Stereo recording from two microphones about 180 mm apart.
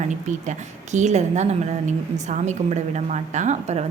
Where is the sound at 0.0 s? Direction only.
40° right (ahead or behind).